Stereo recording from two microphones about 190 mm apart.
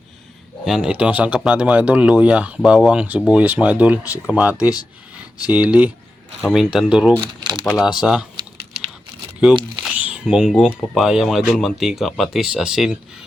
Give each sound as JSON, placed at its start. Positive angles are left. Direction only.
{"t": 0.6, "sound": "speech", "side_deg": -5}
{"t": 7.2, "sound": "crumpling", "side_deg": -25}
{"t": 7.6, "sound": "speech", "side_deg": 0}
{"t": 9.9, "sound": "speech", "side_deg": -5}